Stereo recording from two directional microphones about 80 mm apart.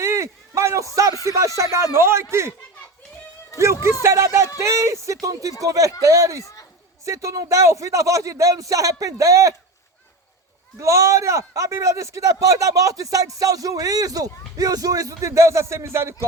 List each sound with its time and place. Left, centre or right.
0.0 s a sound: right
1.2 s speech: right
3.6 s speech: right
10.8 s speech: right